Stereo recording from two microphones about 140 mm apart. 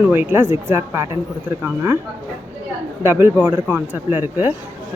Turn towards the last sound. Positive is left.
turn(degrees=-15)  # may be behind; listen again after turning